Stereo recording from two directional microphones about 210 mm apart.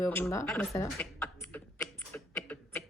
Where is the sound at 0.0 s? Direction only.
10° left (ahead or behind).